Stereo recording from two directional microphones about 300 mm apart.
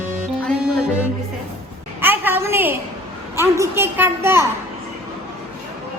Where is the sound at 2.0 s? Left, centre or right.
Centre.